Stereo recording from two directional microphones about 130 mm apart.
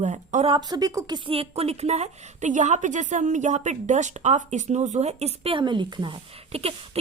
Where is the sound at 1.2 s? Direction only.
50° right (ahead or behind).